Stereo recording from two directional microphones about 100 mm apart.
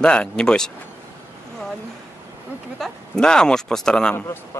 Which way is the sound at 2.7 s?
5° left (ahead or behind).